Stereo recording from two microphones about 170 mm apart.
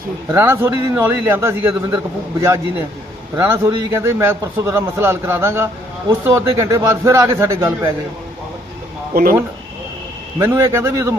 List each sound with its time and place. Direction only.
0.3 s a man's voice: 15° right (ahead or behind)
10.3 s a man's voice: 15° right (ahead or behind)